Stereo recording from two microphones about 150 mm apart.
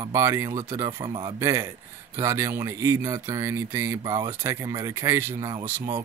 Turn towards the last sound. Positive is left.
turn(degrees=-15)  # may be behind; listen again after turning